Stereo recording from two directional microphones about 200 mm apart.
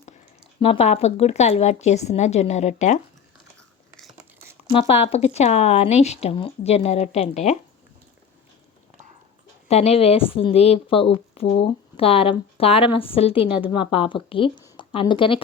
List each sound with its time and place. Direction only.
0.6 s speech: 30° left (ahead or behind)
4.7 s speech: 30° left (ahead or behind)
9.6 s a woman's voice: 30° left (ahead or behind)